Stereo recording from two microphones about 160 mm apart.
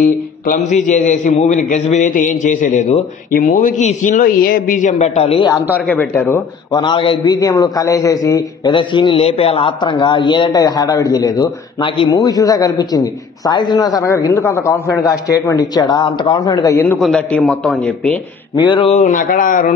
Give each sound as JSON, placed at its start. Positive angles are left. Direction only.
{"t": 0.5, "sound": "a man's voice", "side_deg": 50}
{"t": 5.8, "sound": "a man's voice", "side_deg": 10}
{"t": 6.8, "sound": "a man's voice", "side_deg": 30}
{"t": 17.0, "sound": "a man's voice", "side_deg": 5}
{"t": 18.6, "sound": "speech", "side_deg": 30}
{"t": 18.9, "sound": "speech", "side_deg": 50}